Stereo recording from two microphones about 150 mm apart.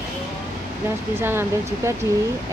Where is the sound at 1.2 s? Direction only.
15° right (ahead or behind).